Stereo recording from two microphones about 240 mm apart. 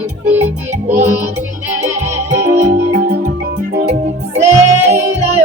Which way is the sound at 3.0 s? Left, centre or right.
Right.